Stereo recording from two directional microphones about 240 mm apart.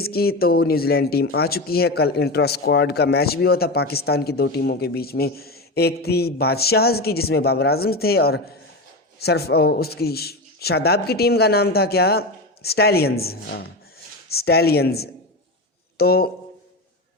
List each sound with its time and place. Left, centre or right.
0.0 s speech: left